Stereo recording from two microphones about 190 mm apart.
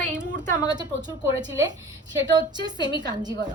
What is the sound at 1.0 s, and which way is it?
Speech, 20° right (ahead or behind).